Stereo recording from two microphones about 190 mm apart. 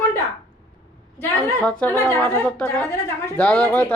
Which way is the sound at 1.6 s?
5° left (ahead or behind).